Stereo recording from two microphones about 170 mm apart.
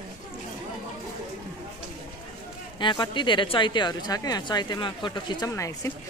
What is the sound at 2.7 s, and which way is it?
Speech, 25° left (ahead or behind).